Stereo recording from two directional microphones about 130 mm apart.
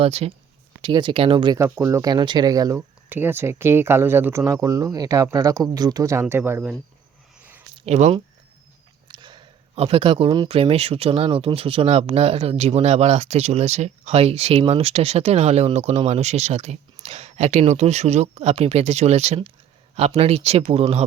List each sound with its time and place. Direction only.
0.0 s speech: 50° right (ahead or behind)
0.8 s speech: 40° right (ahead or behind)
1.5 s speech: 20° right (ahead or behind)
3.1 s speech: 15° right (ahead or behind)
7.9 s speech: 65° right (ahead or behind)
9.0 s a sound: 35° right (ahead or behind)
9.7 s speech: 50° right (ahead or behind)